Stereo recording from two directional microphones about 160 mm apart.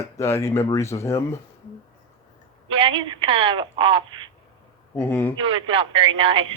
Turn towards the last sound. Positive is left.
turn(degrees=-35)  # may be behind; listen again after turning